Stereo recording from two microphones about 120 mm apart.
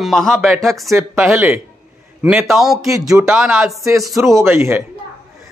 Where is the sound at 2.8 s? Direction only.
25° right (ahead or behind).